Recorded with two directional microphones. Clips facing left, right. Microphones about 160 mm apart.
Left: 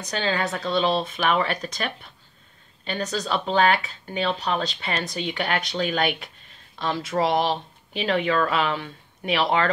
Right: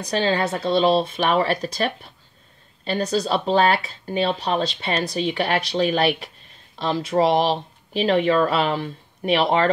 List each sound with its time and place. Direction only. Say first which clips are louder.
0.1 s speech: right 4 dB; 35° right (ahead or behind)